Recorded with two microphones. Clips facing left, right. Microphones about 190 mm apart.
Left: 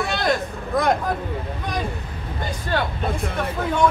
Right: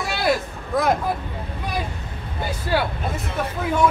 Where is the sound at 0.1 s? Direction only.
5° right (ahead or behind).